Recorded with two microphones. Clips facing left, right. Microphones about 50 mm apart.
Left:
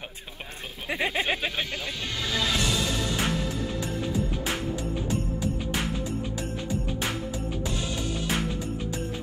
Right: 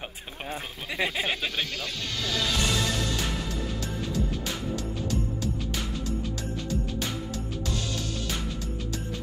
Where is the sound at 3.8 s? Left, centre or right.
Centre.